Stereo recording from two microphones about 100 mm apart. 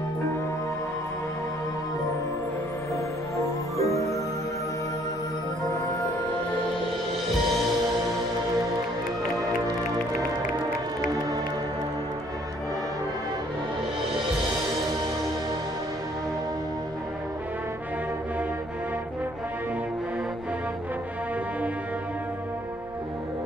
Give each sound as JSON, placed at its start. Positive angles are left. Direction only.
{"t": 3.3, "sound": "music", "side_deg": 30}
{"t": 11.1, "sound": "music", "side_deg": -40}